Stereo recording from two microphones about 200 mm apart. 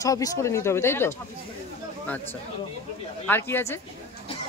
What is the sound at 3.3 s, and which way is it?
Speech, 10° left (ahead or behind).